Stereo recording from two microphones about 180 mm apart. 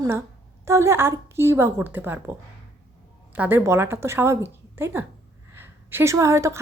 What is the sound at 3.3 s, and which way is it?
A woman's voice, 10° right (ahead or behind).